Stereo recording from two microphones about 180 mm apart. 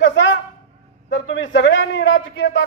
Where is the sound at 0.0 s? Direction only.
90° left.